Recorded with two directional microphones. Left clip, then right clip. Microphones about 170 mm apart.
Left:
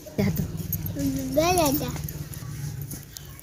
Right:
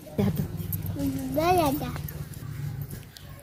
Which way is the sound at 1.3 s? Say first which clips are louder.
Left 1 dB; 55° left (ahead or behind).